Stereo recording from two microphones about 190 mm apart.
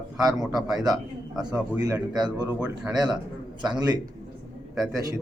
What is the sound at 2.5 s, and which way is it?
Speech, 5° right (ahead or behind).